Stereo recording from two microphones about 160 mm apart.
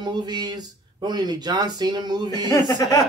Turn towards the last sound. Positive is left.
turn(degrees=25)  # may be behind; listen again after turning